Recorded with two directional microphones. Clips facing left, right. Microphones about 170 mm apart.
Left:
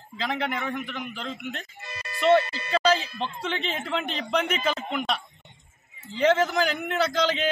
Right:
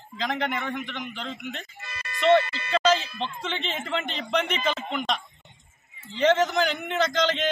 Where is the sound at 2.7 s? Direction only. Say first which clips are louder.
Right 1 dB; 5° left (ahead or behind).